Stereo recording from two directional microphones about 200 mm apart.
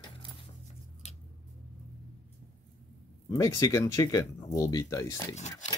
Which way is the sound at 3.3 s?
15° left (ahead or behind).